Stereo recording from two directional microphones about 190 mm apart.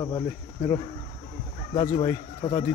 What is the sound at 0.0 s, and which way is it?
Cricket, 20° left (ahead or behind).